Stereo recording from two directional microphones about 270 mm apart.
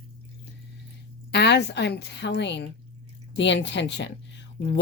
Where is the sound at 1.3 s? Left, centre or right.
Left.